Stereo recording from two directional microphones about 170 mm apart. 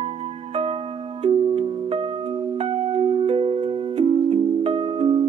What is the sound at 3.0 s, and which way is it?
Music, 35° right (ahead or behind).